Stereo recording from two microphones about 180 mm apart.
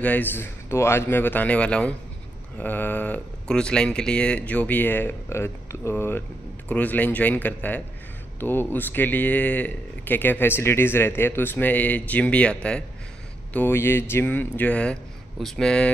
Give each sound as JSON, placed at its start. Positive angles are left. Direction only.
{"t": 0.0, "sound": "speech", "side_deg": 10}